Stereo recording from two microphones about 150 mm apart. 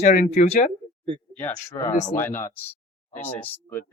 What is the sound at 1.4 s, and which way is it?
Speech, 20° left (ahead or behind).